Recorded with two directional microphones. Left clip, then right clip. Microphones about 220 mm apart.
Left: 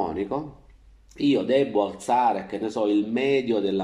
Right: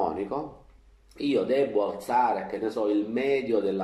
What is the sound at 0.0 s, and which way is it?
Speech, 30° left (ahead or behind).